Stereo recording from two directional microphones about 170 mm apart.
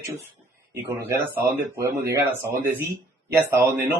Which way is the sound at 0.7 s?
20° right (ahead or behind).